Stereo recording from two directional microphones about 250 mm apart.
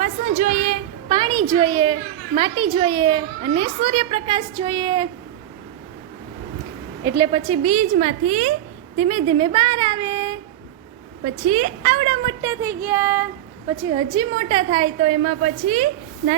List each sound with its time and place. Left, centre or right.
0.0 s a sound: right
1.0 s a child's voice: centre
7.0 s a woman's voice: centre
7.9 s a child's voice: right
11.4 s a woman's voice: right; by 13.2 s centre
13.9 s a child's voice: centre